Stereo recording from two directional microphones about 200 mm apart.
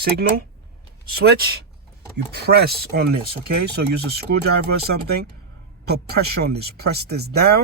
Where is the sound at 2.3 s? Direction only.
55° right (ahead or behind).